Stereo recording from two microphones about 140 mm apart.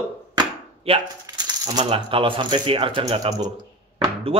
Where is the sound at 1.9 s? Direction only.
40° right (ahead or behind).